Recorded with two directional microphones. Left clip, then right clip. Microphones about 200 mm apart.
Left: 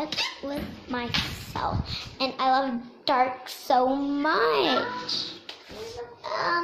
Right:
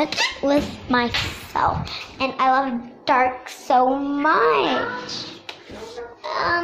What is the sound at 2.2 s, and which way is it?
A woman's voice, 10° left (ahead or behind).